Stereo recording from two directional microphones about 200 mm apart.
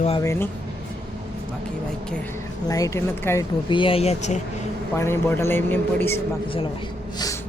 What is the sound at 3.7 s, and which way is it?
Speech, 25° left (ahead or behind).